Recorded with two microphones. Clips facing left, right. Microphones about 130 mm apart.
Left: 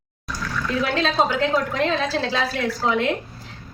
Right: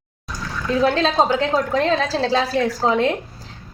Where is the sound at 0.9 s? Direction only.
40° right (ahead or behind).